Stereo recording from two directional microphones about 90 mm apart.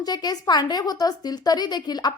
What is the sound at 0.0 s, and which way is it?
A woman's voice, 50° left (ahead or behind).